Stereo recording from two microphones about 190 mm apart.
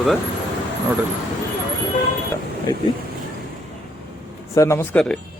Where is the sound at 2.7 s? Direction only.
20° left (ahead or behind).